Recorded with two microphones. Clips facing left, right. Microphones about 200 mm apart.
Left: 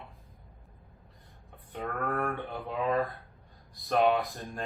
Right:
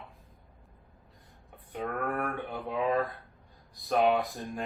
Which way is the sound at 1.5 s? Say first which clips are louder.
Right 2 dB; centre (ahead or behind).